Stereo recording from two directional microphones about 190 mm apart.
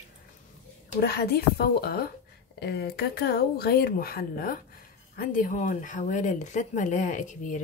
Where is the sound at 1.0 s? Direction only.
55° left (ahead or behind).